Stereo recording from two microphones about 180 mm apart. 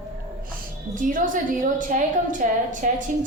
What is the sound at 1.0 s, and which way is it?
A woman's voice, 45° right (ahead or behind).